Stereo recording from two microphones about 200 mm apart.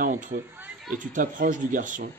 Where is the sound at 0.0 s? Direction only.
40° right (ahead or behind).